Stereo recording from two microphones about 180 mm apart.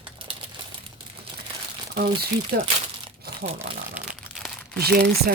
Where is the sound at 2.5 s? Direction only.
55° right (ahead or behind).